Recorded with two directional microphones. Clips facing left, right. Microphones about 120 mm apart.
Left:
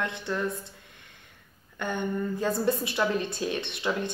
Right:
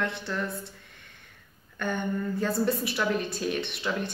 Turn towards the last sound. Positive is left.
turn(degrees=20)  # may be behind; listen again after turning